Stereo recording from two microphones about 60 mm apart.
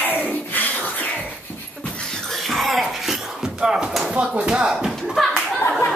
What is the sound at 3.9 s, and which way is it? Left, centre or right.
Speech, centre.